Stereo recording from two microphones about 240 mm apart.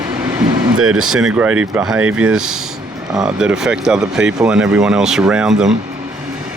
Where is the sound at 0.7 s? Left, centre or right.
Right.